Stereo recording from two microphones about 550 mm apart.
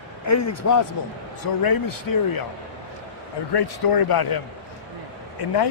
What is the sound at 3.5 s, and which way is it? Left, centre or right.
Speech, left.